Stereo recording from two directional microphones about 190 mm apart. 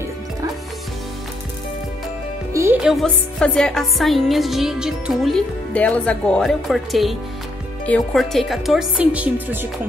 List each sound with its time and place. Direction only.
2.5 s music: 15° right (ahead or behind)
2.8 s speech: centre (ahead or behind)